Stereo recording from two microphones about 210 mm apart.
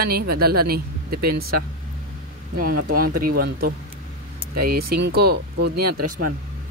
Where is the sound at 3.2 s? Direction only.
45° right (ahead or behind).